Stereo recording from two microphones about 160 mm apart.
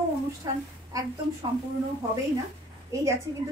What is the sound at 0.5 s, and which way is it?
Speech, 25° right (ahead or behind).